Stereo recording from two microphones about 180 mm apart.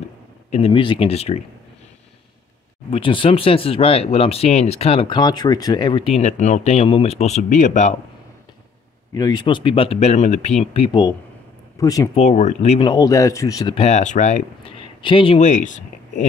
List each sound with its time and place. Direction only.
0.5 s speech: 30° left (ahead or behind)
2.9 s speech: 30° left (ahead or behind)
9.1 s speech: 20° left (ahead or behind)
12.2 s speech: 40° left (ahead or behind)
12.8 s speech: 20° left (ahead or behind)
13.7 s speech: 40° left (ahead or behind)
15.4 s speech: 45° left (ahead or behind)